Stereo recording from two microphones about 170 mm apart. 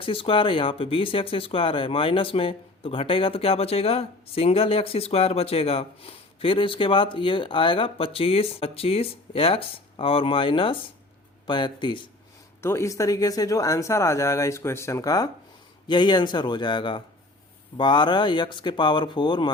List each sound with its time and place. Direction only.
0.0 s speech: 30° left (ahead or behind)
12.6 s speech: 15° left (ahead or behind)